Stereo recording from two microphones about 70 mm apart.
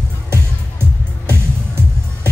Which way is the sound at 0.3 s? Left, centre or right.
Right.